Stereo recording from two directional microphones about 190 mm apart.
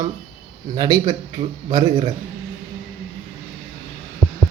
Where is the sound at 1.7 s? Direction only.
25° right (ahead or behind).